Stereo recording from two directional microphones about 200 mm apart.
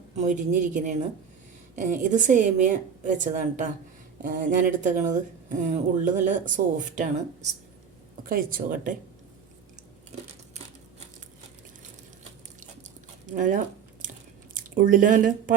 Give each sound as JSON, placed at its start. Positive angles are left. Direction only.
{"t": 0.2, "sound": "speech", "side_deg": -40}
{"t": 13.2, "sound": "speech", "side_deg": -40}